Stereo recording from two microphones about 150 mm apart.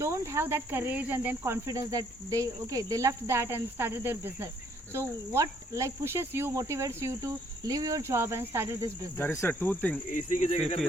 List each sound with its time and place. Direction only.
0.0 s speech: 20° right (ahead or behind)
9.1 s speech: 15° left (ahead or behind)
10.1 s speech: 55° left (ahead or behind)